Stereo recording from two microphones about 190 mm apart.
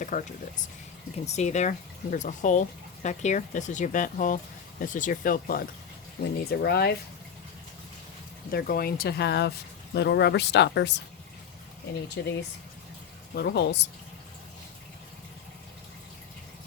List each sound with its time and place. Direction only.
0.0 s speech: 40° left (ahead or behind); by 6.9 s 60° left (ahead or behind)
8.4 s speech: 50° left (ahead or behind)
12.2 s speech: 60° left (ahead or behind)
13.3 s speech: 60° left (ahead or behind)